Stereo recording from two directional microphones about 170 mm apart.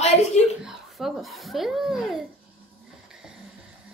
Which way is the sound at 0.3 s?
40° left (ahead or behind).